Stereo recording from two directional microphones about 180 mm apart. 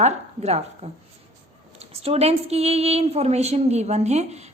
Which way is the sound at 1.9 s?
35° right (ahead or behind).